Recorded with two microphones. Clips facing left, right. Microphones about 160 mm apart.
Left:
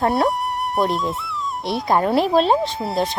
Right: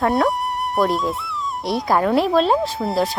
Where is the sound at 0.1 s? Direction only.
Centre (ahead or behind).